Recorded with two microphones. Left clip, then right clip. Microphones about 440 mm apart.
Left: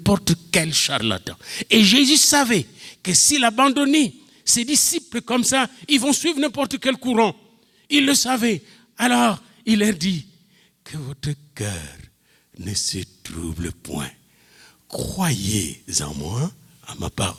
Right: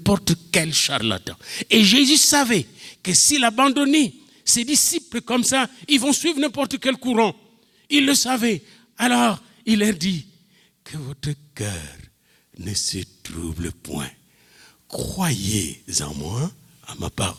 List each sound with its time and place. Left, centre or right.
0.0 s speech: left; by 7.4 s centre
7.9 s speech: centre; by 9.5 s left
9.6 s a man's voice: left
10.8 s speech: centre; by 12.0 s right
12.5 s speech: right
14.6 s speech: right; by 16.6 s centre
16.8 s a sound: left